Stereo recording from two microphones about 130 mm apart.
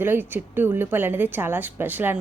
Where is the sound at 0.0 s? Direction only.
15° right (ahead or behind).